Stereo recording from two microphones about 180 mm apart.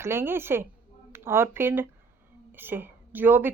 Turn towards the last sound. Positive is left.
turn(degrees=-10)  # may be behind; listen again after turning